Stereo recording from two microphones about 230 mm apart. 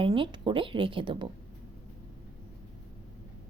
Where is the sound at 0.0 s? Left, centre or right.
Right.